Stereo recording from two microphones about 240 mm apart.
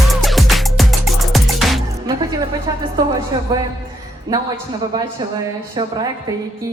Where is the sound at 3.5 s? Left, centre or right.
Centre.